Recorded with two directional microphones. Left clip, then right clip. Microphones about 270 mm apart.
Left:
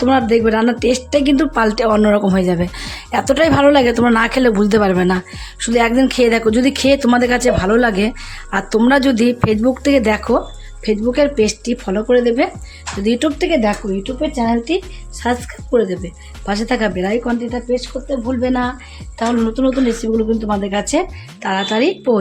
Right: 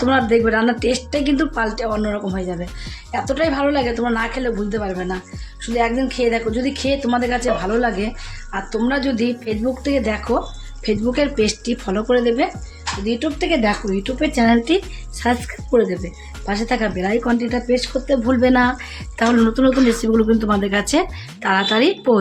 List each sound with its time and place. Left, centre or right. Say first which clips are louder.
0.0 s speech: left 2 dB; left
10.8 s speech: left 4 dB; centre
13.1 s speech: left 5 dB; left
14.0 s speech: right 3 dB; centre
17.2 s speech: even; centre